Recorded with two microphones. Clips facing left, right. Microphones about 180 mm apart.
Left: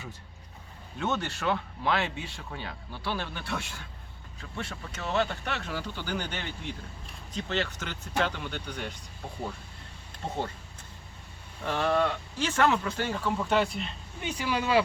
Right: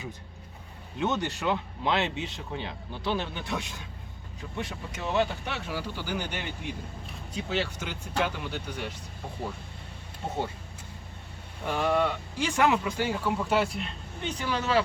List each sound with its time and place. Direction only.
0.9 s speech: 15° right (ahead or behind)
10.2 s speech: 10° right (ahead or behind)
11.6 s speech: 10° right (ahead or behind)
14.2 s speech: 10° left (ahead or behind)